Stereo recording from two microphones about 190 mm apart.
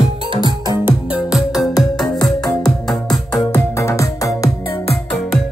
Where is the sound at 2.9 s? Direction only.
Centre (ahead or behind); by 4.7 s 15° left (ahead or behind).